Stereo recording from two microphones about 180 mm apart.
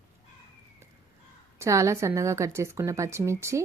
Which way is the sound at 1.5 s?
15° right (ahead or behind).